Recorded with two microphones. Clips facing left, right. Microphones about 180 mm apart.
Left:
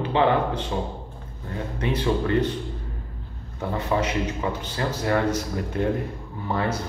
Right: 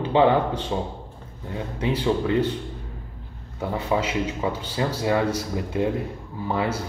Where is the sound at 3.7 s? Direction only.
10° right (ahead or behind).